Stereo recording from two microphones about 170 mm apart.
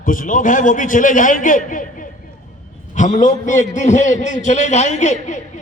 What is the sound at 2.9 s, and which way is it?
A man's voice, 50° left (ahead or behind).